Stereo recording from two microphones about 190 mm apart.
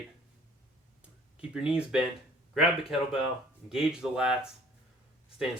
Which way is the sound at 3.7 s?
5° right (ahead or behind).